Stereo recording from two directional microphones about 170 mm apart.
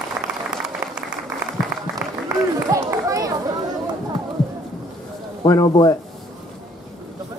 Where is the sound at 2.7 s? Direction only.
20° right (ahead or behind).